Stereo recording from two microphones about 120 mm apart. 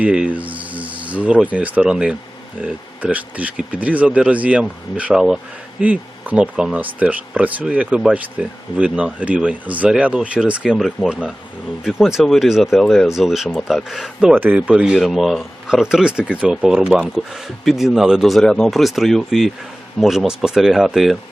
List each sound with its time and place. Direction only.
0.0 s speech: 10° right (ahead or behind)